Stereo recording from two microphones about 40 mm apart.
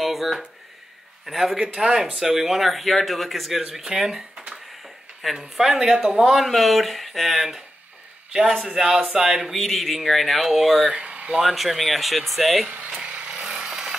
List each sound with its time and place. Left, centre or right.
0.0 s a sound: centre
1.2 s speech: centre
6.5 s speech: centre
8.3 s a man's voice: centre
9.6 s speech: centre
10.9 s speech: right
11.4 s speech: centre
12.6 s a sound: right
13.0 s a sound: right